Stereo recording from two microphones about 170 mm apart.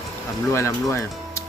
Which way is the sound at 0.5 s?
15° left (ahead or behind).